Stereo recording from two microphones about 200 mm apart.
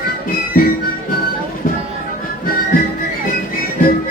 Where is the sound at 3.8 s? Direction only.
45° left (ahead or behind).